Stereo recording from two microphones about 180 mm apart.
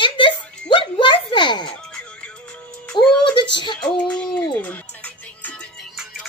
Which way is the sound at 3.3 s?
25° left (ahead or behind).